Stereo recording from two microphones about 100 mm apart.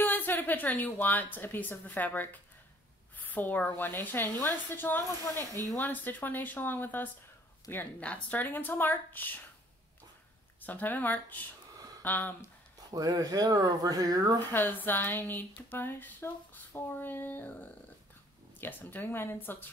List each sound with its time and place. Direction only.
0.0 s a woman's voice: 20° left (ahead or behind)
10.6 s speech: 15° left (ahead or behind)
12.9 s speech: 40° right (ahead or behind)
14.5 s a woman's voice: 20° left (ahead or behind)